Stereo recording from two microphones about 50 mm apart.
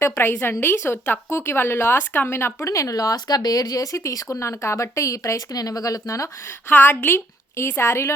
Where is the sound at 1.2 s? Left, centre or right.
Left.